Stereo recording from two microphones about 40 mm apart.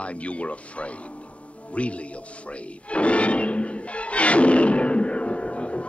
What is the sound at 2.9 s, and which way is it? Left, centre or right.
Music, left.